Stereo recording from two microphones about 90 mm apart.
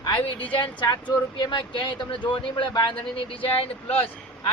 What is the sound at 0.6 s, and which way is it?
Speech, 60° left (ahead or behind).